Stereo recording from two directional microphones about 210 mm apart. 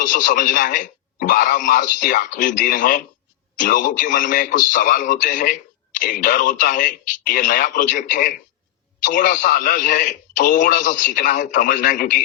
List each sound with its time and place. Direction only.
0.0 s a man's voice: 40° left (ahead or behind)